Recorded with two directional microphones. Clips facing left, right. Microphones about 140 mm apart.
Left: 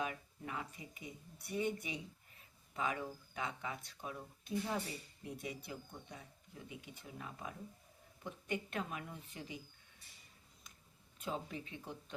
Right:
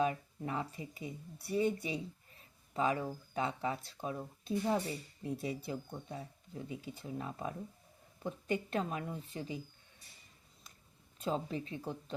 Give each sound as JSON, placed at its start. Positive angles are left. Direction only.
{"t": 0.0, "sound": "speech", "side_deg": -35}
{"t": 11.2, "sound": "speech", "side_deg": -35}